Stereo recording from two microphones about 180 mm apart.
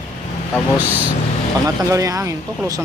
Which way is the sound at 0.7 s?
10° right (ahead or behind).